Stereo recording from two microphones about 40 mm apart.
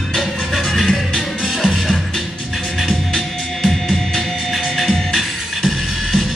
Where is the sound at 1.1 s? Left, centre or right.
Centre.